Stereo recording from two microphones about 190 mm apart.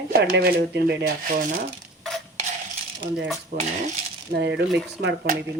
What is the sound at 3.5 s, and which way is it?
Speech, 55° right (ahead or behind).